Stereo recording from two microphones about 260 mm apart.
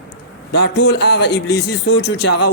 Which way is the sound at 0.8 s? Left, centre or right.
Left.